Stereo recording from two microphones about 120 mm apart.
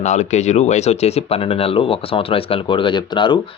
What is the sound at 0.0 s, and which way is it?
Speech, 75° left (ahead or behind).